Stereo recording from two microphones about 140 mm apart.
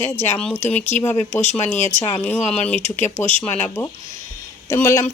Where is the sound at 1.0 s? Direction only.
20° left (ahead or behind).